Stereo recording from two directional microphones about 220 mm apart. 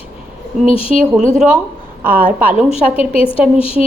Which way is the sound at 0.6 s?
25° left (ahead or behind).